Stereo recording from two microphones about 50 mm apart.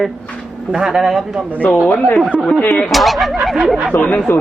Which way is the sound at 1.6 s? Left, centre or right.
Left.